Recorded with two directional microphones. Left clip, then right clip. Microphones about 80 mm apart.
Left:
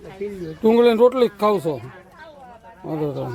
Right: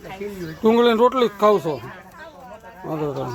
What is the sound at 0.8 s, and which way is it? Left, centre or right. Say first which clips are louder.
Speech: left 2 dB; left.